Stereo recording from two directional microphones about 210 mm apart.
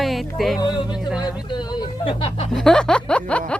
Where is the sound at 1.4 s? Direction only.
20° left (ahead or behind).